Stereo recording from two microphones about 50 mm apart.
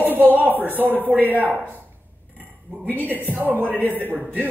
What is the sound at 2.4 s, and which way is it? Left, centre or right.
Cutlery, right.